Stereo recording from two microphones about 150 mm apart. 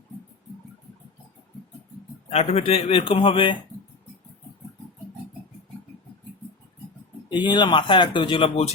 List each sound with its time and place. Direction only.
2.3 s speech: 45° left (ahead or behind)
7.3 s speech: 30° left (ahead or behind)